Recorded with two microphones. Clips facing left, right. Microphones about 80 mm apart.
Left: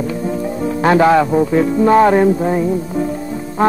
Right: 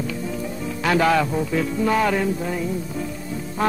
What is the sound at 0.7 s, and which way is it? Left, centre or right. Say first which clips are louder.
Music: left 8 dB; left.